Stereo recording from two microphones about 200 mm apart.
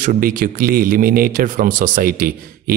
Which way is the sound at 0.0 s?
45° right (ahead or behind).